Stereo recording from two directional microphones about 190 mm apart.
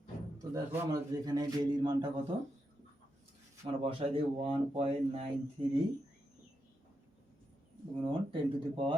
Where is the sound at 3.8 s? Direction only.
30° right (ahead or behind).